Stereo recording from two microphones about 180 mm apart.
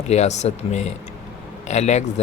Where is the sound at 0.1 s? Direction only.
35° left (ahead or behind).